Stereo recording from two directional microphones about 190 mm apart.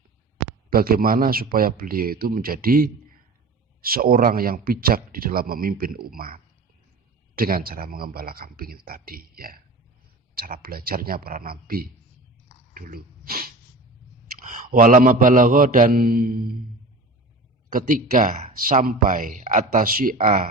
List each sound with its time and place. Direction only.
0.7 s speech: 50° right (ahead or behind)
12.7 s a sound: 50° right (ahead or behind)
14.3 s speech: 45° right (ahead or behind)
17.7 s speech: 45° right (ahead or behind)